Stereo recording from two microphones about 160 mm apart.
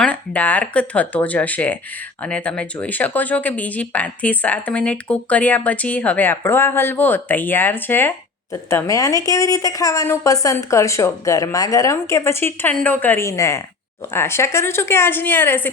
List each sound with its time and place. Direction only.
0.0 s a woman's voice: 10° left (ahead or behind)